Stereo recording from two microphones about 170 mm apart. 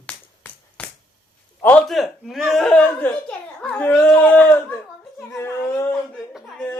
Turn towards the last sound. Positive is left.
turn(degrees=5)  # may be behind; listen again after turning